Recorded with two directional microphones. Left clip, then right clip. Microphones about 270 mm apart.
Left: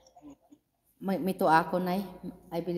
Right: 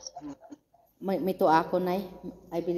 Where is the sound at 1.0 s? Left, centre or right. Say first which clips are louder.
Right 3 dB; left.